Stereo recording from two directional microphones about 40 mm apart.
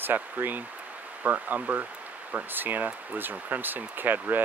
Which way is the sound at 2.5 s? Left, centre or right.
Right.